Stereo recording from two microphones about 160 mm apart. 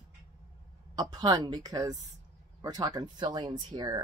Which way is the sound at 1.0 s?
25° right (ahead or behind).